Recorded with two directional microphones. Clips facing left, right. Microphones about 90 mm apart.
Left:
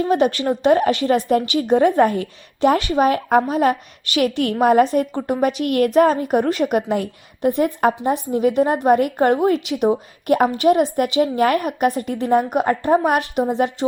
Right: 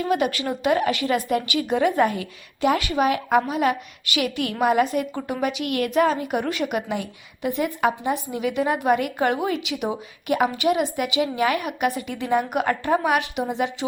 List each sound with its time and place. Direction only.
0.0 s speech: 35° left (ahead or behind)